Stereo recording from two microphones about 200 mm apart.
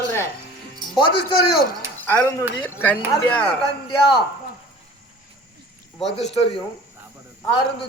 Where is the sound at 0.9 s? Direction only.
25° left (ahead or behind).